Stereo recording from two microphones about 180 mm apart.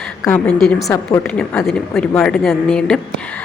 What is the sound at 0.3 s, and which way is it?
A woman's voice, 5° left (ahead or behind).